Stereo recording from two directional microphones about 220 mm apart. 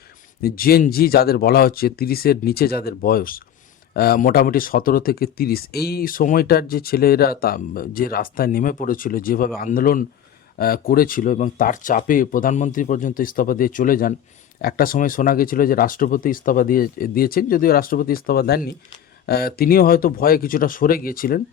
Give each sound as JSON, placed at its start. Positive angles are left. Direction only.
{"t": 0.4, "sound": "speech", "side_deg": 40}